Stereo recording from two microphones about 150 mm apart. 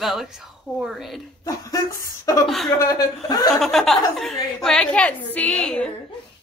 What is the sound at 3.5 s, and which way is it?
A woman's voice, centre (ahead or behind).